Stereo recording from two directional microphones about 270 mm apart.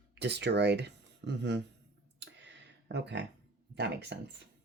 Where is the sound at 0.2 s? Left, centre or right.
Right.